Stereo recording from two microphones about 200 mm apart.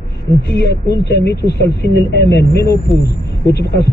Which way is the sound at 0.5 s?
55° left (ahead or behind).